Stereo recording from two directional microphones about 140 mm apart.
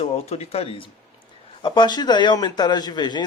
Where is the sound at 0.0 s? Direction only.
50° left (ahead or behind).